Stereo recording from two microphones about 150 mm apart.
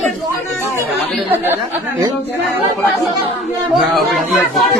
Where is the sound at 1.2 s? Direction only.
15° right (ahead or behind).